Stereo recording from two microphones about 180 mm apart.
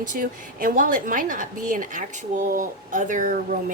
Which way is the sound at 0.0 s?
50° right (ahead or behind).